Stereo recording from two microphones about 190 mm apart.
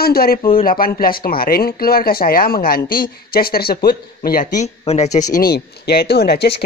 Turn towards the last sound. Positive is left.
turn(degrees=60)  # may be behind; listen again after turning